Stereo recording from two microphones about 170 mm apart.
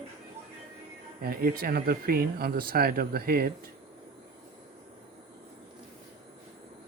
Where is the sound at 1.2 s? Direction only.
65° right (ahead or behind).